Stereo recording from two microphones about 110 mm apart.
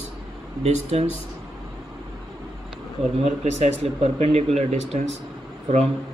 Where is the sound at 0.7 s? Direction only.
80° right.